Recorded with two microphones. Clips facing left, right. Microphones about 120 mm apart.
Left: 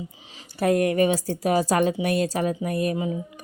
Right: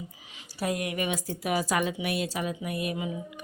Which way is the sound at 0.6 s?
50° left (ahead or behind).